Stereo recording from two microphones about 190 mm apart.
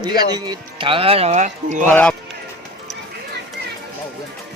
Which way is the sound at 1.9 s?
10° left (ahead or behind).